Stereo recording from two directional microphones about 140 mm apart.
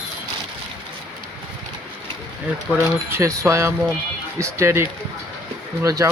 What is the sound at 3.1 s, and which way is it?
Speech, 20° right (ahead or behind).